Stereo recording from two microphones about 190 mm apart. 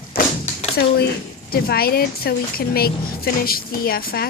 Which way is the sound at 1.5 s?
55° left (ahead or behind).